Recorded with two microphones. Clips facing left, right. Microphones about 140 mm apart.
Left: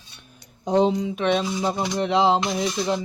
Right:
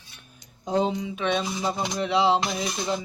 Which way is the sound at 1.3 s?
25° left (ahead or behind).